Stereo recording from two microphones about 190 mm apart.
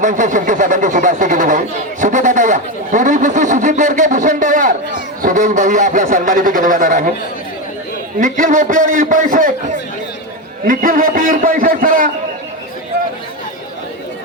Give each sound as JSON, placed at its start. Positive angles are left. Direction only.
{"t": 0.0, "sound": "speech", "side_deg": -40}
{"t": 8.2, "sound": "speech", "side_deg": -40}